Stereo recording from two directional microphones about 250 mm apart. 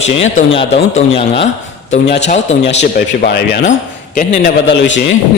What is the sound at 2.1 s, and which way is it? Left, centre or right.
A man's voice, left.